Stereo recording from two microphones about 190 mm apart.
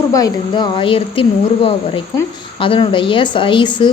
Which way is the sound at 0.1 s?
20° left (ahead or behind).